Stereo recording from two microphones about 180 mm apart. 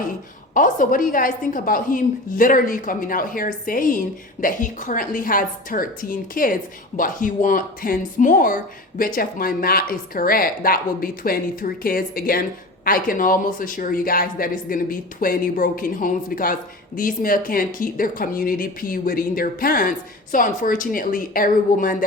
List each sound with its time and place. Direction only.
0.5 s a woman's voice: 45° left (ahead or behind)